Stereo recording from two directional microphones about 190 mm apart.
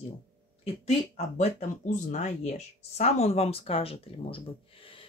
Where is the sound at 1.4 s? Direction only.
40° left (ahead or behind).